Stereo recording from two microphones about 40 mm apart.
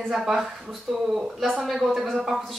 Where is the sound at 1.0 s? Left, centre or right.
Centre.